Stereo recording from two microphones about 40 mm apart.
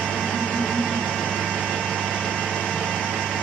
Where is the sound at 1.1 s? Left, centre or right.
Left.